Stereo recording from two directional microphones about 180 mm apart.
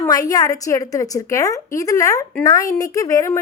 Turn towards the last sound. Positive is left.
turn(degrees=15)  # may be behind; listen again after turning